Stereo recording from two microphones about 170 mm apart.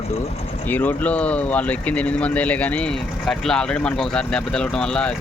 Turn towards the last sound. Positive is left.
turn(degrees=5)  # may be behind; listen again after turning